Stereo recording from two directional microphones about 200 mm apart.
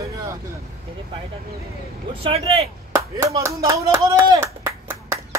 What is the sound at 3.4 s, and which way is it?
Speech, 15° right (ahead or behind).